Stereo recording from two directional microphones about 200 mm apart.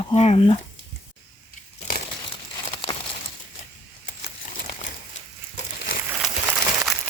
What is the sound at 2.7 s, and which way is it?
Crumpling, 25° left (ahead or behind).